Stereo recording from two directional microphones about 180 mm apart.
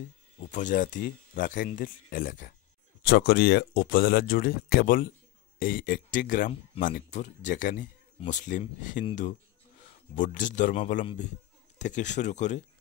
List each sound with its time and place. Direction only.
0.5 s speech: 45° left (ahead or behind)
3.0 s speech: 60° left (ahead or behind); by 9.0 s 45° left (ahead or behind)
10.1 s speech: 45° left (ahead or behind)
11.8 s speech: 40° left (ahead or behind)